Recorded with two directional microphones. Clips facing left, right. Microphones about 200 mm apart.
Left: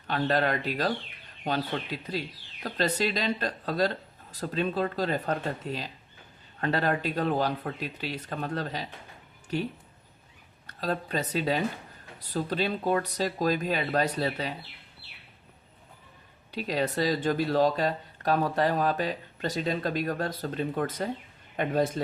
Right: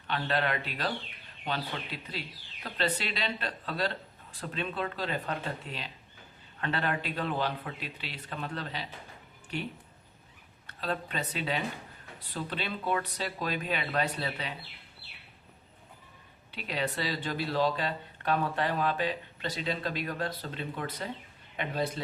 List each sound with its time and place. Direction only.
0.1 s speech: 40° left (ahead or behind)
10.7 s speech: 40° left (ahead or behind)
16.5 s speech: 40° left (ahead or behind)